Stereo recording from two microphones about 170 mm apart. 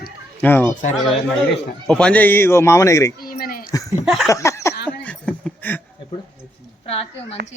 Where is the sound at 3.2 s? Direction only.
60° left (ahead or behind).